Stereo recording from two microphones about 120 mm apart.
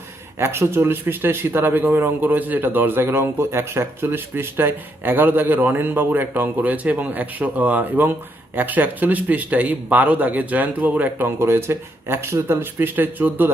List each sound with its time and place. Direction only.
0.3 s speech: 20° right (ahead or behind)